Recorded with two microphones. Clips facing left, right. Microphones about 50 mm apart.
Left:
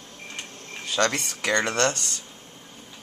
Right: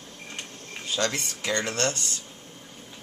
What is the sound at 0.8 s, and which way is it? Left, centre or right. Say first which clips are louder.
Speech: left 4 dB; left.